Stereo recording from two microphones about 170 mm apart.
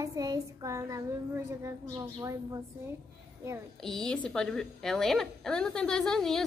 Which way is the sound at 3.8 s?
5° left (ahead or behind).